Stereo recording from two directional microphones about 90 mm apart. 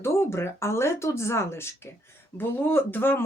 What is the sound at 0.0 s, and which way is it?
Speech, 30° left (ahead or behind).